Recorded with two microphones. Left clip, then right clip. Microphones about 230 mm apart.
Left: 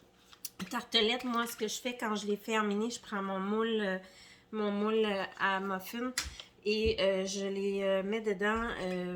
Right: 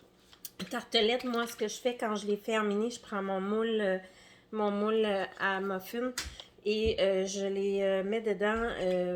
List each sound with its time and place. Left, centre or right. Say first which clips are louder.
0.7 s speech: right 2 dB; centre